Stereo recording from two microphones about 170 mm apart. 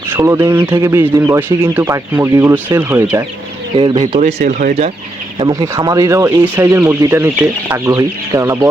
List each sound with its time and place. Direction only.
0.1 s speech: 15° right (ahead or behind)
3.8 s speech: 25° right (ahead or behind)
4.0 s speech: 40° right (ahead or behind)
5.4 s speech: 20° right (ahead or behind)